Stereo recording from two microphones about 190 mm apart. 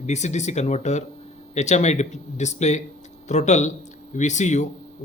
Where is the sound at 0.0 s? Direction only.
35° left (ahead or behind).